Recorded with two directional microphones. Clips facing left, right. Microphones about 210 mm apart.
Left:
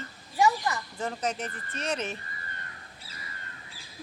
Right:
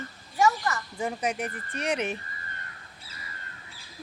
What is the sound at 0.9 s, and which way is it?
Speech, 10° right (ahead or behind).